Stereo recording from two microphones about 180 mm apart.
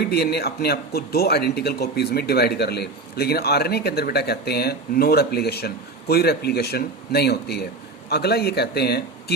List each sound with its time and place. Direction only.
0.0 s speech: 65° left (ahead or behind)